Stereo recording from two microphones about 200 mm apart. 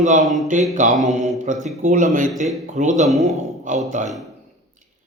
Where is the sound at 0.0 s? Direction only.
40° right (ahead or behind).